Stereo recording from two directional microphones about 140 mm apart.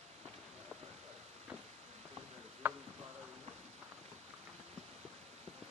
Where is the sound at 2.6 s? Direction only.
15° right (ahead or behind).